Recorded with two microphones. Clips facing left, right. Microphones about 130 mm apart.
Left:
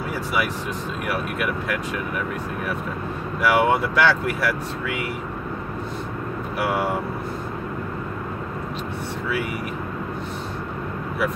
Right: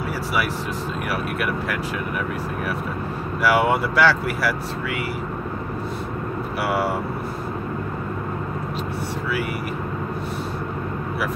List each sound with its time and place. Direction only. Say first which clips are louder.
1.1 s speech: even; centre (ahead or behind)
3.4 s speech: even; centre (ahead or behind)
6.6 s speech: even; 5° right (ahead or behind)